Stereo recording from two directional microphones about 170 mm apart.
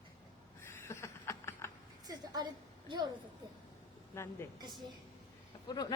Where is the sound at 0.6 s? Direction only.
15° left (ahead or behind).